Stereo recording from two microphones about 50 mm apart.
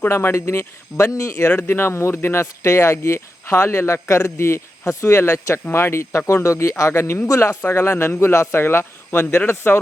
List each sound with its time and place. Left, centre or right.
0.1 s speech: left
1.5 s speech: left
4.9 s speech: left
7.3 s speech: left
7.7 s speech: left